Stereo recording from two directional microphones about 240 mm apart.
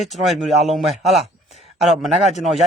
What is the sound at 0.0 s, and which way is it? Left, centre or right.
Speech, centre.